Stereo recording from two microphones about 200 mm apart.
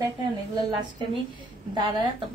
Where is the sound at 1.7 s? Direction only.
25° right (ahead or behind).